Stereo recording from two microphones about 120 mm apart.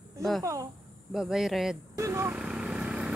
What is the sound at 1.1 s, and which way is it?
Speech, 5° right (ahead or behind).